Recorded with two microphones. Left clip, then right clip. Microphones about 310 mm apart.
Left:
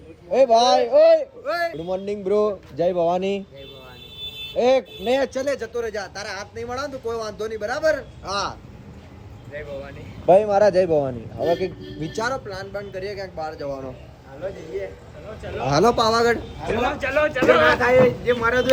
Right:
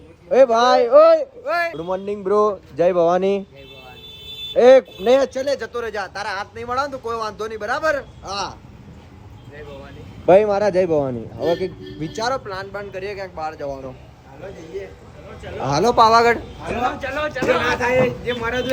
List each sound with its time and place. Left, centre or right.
0.3 s a man's voice: right
0.5 s speech: centre
4.5 s speech: centre
5.2 s speech: centre
5.5 s speech: right
5.8 s speech: centre